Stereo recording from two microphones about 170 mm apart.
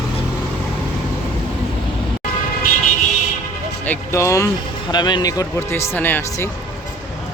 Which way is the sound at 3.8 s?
15° left (ahead or behind).